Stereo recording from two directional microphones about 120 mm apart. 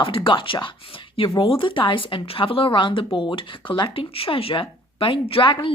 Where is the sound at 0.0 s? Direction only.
45° left (ahead or behind).